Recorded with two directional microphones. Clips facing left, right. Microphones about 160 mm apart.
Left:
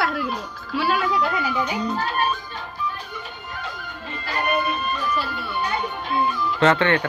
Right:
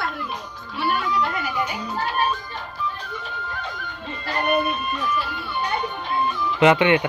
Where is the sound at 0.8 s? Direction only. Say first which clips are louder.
Left 2 dB; 90° left.